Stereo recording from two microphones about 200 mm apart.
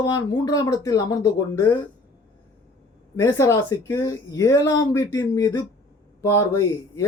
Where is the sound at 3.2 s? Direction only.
15° left (ahead or behind).